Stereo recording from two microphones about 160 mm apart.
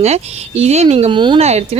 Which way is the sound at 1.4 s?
40° right (ahead or behind).